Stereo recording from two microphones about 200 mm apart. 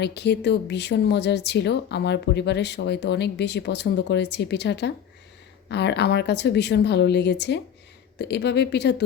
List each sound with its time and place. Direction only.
0.0 s speech: 60° left (ahead or behind)